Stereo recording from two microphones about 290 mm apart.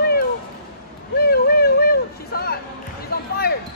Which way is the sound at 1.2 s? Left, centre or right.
Left.